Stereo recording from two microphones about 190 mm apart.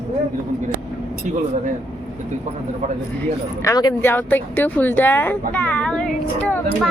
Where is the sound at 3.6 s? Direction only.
20° left (ahead or behind).